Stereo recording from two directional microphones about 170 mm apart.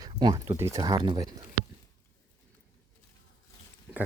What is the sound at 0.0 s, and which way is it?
Speech, 25° right (ahead or behind).